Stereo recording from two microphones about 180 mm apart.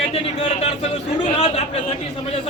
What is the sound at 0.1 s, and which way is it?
A man's voice, 35° left (ahead or behind).